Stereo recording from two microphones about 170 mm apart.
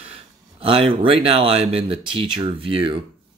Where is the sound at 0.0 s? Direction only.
35° right (ahead or behind).